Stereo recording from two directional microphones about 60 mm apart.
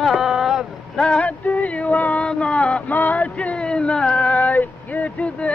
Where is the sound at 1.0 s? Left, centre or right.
Centre.